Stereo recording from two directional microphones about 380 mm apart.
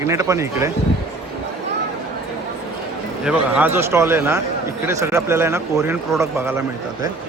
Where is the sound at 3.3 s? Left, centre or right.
Centre.